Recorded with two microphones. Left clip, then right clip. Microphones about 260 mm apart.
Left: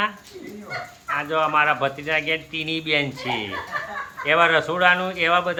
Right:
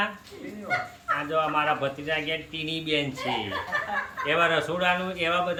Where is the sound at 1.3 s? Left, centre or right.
Centre.